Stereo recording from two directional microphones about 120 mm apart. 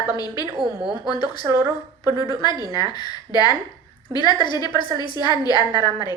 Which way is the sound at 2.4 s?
35° left (ahead or behind).